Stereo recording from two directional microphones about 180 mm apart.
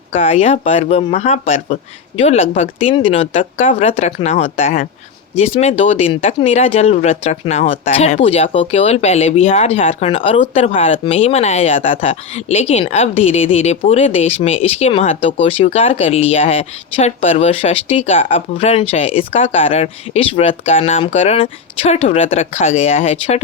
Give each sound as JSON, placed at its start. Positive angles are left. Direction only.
{"t": 0.1, "sound": "speech", "side_deg": 35}